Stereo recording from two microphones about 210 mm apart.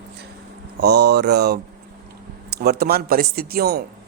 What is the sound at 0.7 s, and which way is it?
Speech, 50° right (ahead or behind).